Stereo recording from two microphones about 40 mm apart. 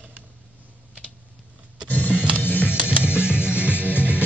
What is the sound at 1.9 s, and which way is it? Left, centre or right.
Music, left.